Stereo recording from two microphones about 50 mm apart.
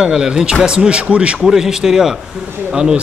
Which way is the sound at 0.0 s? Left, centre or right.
Centre.